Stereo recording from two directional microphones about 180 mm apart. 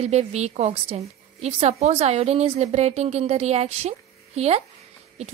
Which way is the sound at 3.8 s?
35° right (ahead or behind).